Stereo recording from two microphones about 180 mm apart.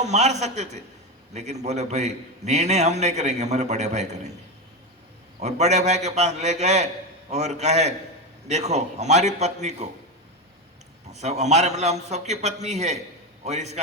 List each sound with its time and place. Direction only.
0.0 s a man's voice: 40° right (ahead or behind)
5.4 s a man's voice: 40° right (ahead or behind)
11.1 s a man's voice: 40° right (ahead or behind)